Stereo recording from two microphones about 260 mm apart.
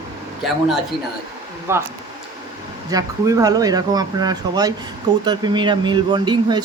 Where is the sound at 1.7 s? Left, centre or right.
Centre.